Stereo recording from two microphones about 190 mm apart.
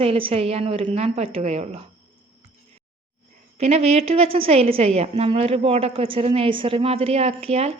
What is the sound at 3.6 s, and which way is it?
A woman's voice, 35° right (ahead or behind).